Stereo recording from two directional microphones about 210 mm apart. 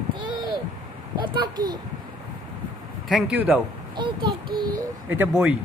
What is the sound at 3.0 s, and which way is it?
Speech, 5° right (ahead or behind).